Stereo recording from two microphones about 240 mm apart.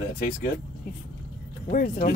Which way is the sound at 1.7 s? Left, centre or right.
Left.